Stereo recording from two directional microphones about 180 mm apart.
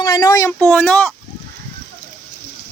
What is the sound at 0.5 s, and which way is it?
Speech, 5° left (ahead or behind).